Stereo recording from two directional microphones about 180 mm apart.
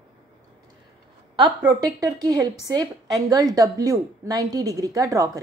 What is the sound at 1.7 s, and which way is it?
A woman's voice, 20° right (ahead or behind).